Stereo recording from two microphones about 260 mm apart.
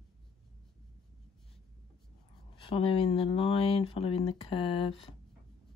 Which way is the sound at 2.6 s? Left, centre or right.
Left.